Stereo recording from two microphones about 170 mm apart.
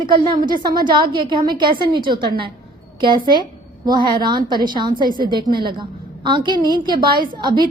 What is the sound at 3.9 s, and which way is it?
A woman's voice, 25° right (ahead or behind).